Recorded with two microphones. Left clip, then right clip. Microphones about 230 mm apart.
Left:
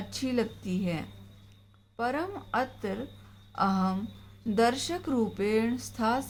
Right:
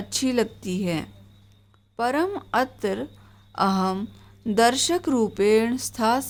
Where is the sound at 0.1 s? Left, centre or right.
Right.